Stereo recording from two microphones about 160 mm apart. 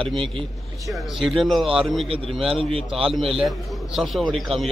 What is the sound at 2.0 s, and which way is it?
Speech, 35° right (ahead or behind).